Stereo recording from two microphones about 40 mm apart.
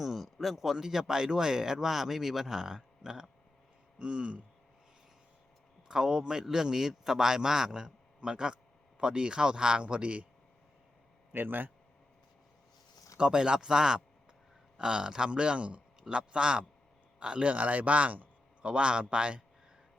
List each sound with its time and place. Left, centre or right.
0.0 s speech: centre
3.9 s a sound: right
5.9 s speech: centre; by 10.2 s right
11.3 s speech: right
13.1 s speech: right
17.5 s speech: right
18.6 s speech: right